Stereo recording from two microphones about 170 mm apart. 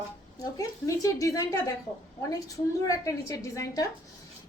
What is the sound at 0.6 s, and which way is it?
A woman's voice, 20° left (ahead or behind).